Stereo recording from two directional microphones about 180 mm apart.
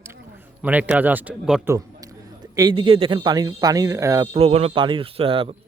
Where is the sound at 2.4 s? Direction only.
25° right (ahead or behind).